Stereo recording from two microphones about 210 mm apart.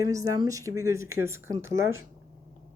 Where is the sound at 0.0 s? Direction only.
15° right (ahead or behind).